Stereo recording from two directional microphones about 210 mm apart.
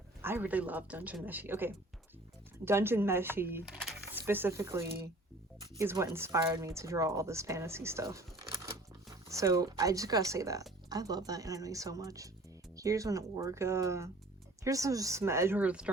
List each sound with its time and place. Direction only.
0.2 s speech: 10° right (ahead or behind)
9.3 s speech: 15° right (ahead or behind)